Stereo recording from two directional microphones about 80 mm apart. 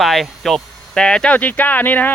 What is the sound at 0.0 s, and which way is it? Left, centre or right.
Speech, centre.